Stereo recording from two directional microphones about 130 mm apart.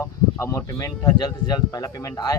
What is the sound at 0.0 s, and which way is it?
Speech, 20° left (ahead or behind).